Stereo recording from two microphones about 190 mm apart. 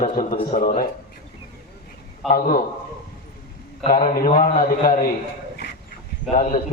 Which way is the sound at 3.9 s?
45° left (ahead or behind).